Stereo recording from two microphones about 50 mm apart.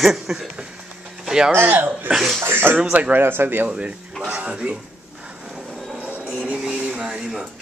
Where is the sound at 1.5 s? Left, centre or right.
Right.